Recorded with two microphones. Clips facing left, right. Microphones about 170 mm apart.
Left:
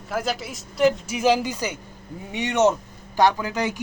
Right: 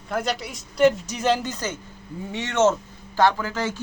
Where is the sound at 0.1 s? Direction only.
Centre (ahead or behind).